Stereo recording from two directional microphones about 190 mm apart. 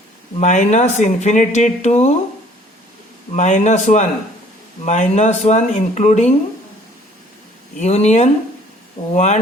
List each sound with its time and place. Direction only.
0.3 s speech: 40° left (ahead or behind)
3.3 s speech: 40° left (ahead or behind)
7.8 s speech: 35° left (ahead or behind)